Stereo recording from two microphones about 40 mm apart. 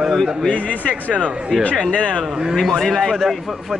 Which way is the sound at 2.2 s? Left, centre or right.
Centre.